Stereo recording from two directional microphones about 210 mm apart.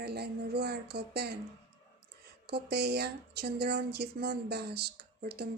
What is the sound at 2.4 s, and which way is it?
Speech, 50° right (ahead or behind).